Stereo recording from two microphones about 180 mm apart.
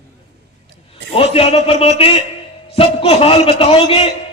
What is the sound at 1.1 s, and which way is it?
Speech, 30° left (ahead or behind).